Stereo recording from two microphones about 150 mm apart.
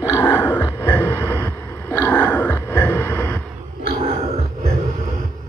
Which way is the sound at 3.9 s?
50° right (ahead or behind).